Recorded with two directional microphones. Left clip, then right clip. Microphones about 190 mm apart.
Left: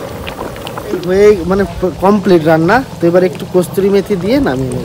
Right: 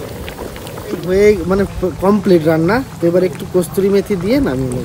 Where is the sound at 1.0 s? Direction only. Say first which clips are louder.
Left 3 dB; centre (ahead or behind).